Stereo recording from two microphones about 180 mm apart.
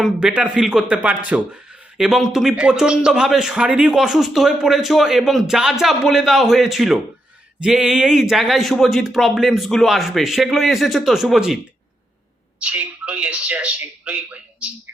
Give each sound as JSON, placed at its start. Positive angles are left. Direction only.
{"t": 0.0, "sound": "a man's voice", "side_deg": -5}
{"t": 12.6, "sound": "speech", "side_deg": -5}